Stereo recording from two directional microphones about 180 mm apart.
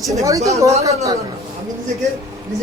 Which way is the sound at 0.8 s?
20° right (ahead or behind).